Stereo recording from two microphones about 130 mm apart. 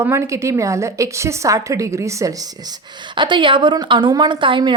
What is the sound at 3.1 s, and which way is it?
A woman's voice, 35° right (ahead or behind).